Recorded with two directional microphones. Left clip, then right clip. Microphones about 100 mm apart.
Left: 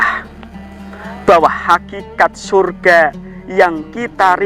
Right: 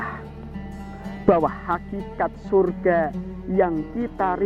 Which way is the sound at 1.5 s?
30° left (ahead or behind).